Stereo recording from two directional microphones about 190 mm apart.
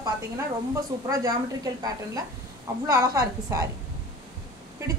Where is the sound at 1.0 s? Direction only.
15° right (ahead or behind).